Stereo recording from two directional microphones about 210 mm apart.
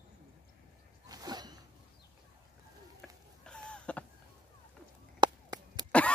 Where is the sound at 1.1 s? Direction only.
20° right (ahead or behind).